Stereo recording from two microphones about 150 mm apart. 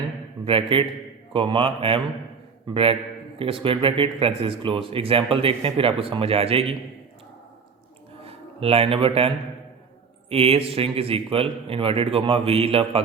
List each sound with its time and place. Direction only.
0.4 s speech: 40° right (ahead or behind)
3.3 s speech: 35° right (ahead or behind)
8.2 s speech: 40° right (ahead or behind)